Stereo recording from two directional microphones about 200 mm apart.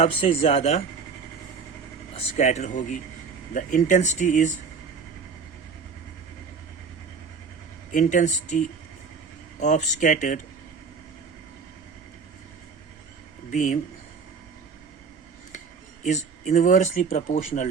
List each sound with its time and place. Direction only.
0.0 s speech: 30° left (ahead or behind)
2.1 s speech: 35° left (ahead or behind)
7.9 s speech: 35° left (ahead or behind)
13.5 s speech: 40° left (ahead or behind)
16.0 s speech: 35° left (ahead or behind)